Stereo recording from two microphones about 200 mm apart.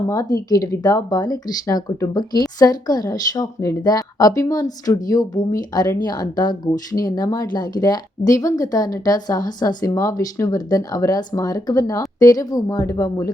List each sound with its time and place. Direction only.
0.1 s speech: 15° left (ahead or behind)